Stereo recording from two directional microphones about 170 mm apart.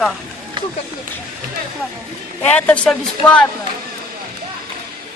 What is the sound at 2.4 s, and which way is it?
Speech, 10° left (ahead or behind).